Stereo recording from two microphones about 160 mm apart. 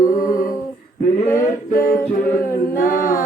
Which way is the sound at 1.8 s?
60° left (ahead or behind).